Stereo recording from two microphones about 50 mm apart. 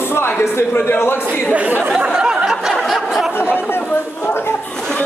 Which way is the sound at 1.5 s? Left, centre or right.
Right.